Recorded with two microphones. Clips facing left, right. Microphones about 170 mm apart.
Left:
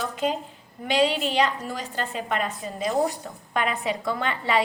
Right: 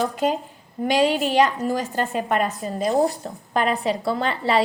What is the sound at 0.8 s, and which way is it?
A woman's voice, 45° right (ahead or behind).